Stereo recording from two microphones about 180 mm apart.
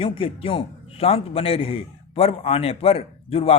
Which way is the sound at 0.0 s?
30° left (ahead or behind).